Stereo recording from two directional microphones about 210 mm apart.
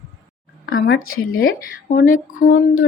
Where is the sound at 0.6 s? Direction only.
70° left (ahead or behind).